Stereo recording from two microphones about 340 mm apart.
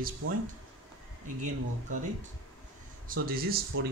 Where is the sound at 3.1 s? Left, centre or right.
Right.